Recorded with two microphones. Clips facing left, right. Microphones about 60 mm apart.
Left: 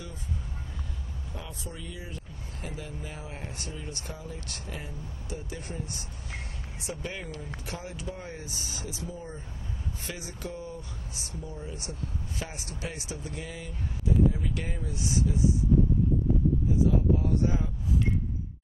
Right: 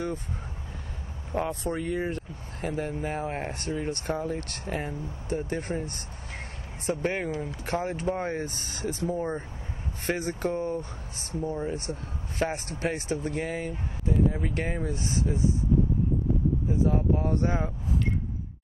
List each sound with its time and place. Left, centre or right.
1.3 s speech: right
16.7 s speech: right